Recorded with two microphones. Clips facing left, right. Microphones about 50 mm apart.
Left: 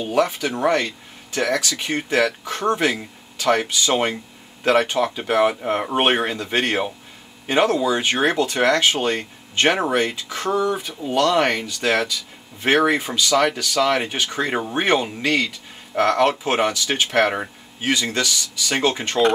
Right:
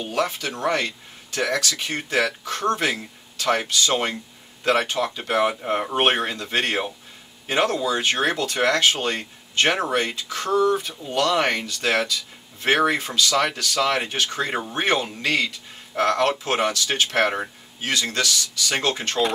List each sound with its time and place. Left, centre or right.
0.0 s speech: centre